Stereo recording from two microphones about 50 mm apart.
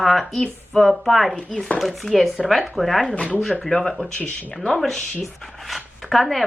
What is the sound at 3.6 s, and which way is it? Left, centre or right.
Speech, centre.